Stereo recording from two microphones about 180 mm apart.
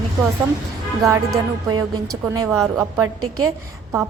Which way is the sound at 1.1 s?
20° right (ahead or behind).